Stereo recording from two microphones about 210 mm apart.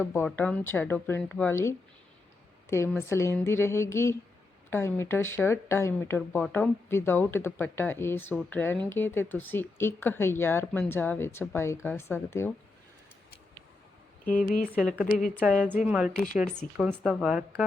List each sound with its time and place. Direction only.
0.0 s a woman's voice: 10° left (ahead or behind)
14.8 s a woman's voice: centre (ahead or behind)
15.0 s speech: 40° left (ahead or behind)
15.4 s a woman's voice: 5° right (ahead or behind)